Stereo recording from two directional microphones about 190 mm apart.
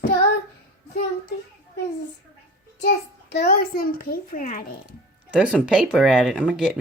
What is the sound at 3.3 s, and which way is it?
A child's voice, 55° left (ahead or behind).